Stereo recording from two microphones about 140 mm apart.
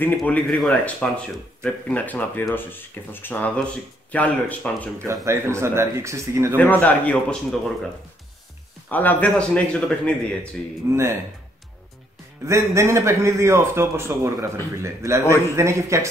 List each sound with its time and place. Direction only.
0.2 s speech: 5° left (ahead or behind)
4.9 s a man's voice: 20° right (ahead or behind)
6.5 s speech: 10° left (ahead or behind)
10.9 s a man's voice: 20° right (ahead or behind)
12.4 s a man's voice: 20° right (ahead or behind)